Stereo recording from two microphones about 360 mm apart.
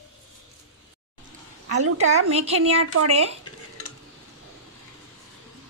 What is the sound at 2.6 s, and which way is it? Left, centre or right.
Speech, right.